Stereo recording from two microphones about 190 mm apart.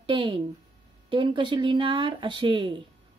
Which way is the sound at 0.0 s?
25° right (ahead or behind).